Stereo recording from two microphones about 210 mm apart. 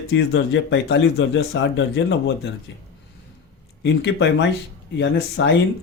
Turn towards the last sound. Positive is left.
turn(degrees=55)  # may be behind; listen again after turning